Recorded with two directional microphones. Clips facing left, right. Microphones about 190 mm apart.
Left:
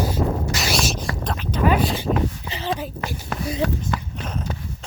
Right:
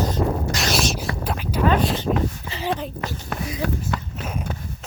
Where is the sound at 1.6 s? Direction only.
10° left (ahead or behind).